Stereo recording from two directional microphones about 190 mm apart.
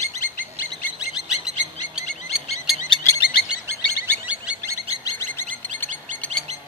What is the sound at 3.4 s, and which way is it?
Bird, 10° right (ahead or behind).